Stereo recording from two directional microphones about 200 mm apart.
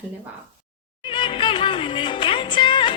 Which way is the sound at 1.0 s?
25° left (ahead or behind).